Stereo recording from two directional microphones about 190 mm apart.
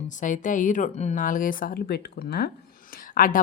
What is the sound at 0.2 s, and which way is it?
Speech, 40° left (ahead or behind).